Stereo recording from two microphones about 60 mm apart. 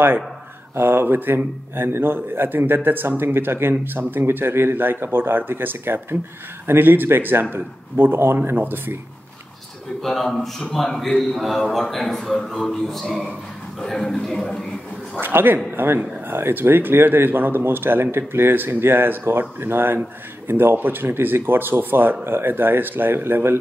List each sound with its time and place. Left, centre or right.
0.7 s speech: right
10.0 s speech: centre
15.1 s speech: right